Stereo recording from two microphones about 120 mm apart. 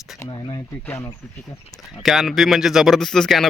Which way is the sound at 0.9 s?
20° left (ahead or behind).